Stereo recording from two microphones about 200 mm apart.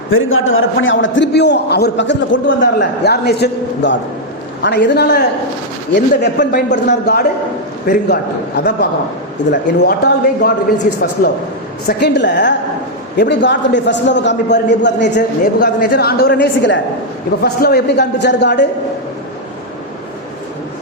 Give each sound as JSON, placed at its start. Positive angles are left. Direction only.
{"t": 0.1, "sound": "a man's voice", "side_deg": 85}
{"t": 7.9, "sound": "a woman's voice", "side_deg": 45}
{"t": 11.9, "sound": "a man's voice", "side_deg": 60}
{"t": 17.4, "sound": "a man's voice", "side_deg": 50}